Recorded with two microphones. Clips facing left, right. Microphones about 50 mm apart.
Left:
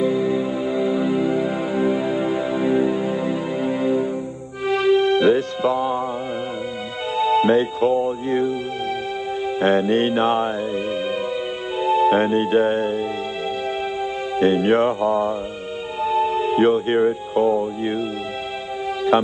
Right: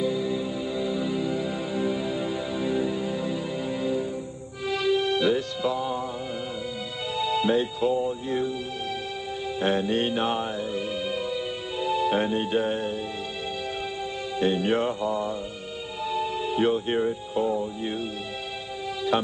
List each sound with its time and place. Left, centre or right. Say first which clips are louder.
0.0 s music: left 7 dB; left
7.2 s music: left 7 dB; left
9.6 s music: left 7 dB; left
11.8 s speech: left 8 dB; left
14.3 s speech: left 7 dB; left